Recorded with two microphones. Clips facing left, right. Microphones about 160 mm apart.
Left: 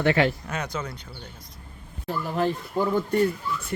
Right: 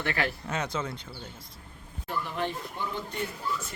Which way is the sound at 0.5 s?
25° right (ahead or behind).